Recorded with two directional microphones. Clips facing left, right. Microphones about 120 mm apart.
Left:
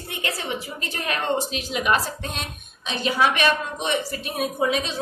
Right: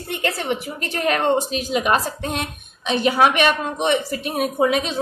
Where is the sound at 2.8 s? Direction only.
60° right (ahead or behind).